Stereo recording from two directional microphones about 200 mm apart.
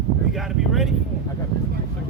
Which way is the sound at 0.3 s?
Centre (ahead or behind).